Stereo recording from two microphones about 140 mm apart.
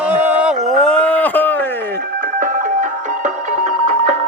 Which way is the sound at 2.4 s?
70° right (ahead or behind).